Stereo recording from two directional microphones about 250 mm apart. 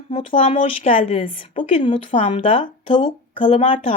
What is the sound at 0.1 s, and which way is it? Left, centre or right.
Speech, left.